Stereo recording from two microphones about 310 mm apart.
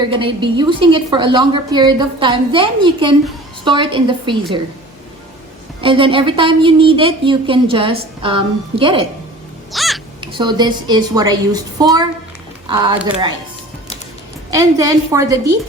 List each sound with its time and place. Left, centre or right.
0.1 s a woman's voice: centre
5.8 s a woman's voice: centre
9.7 s crow: centre
10.2 s a woman's voice: centre
14.5 s a woman's voice: centre